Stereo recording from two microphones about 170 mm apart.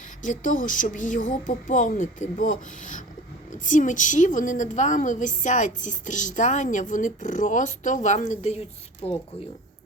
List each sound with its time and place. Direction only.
0.2 s a woman's voice: 50° left (ahead or behind)